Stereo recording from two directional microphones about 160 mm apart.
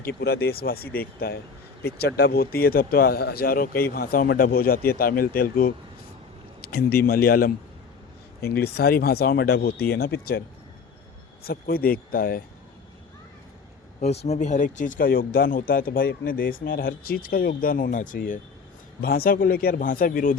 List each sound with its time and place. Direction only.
0.0 s speech: 80° left
1.8 s speech: 85° left; by 7.5 s 65° left (ahead or behind)
8.4 s speech: 75° left (ahead or behind)
11.4 s speech: 65° left (ahead or behind)
14.0 s speech: 40° left (ahead or behind)
19.0 s speech: 70° left (ahead or behind)